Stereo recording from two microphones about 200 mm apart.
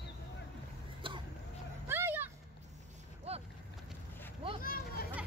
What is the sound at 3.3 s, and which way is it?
Boat, 30° right (ahead or behind).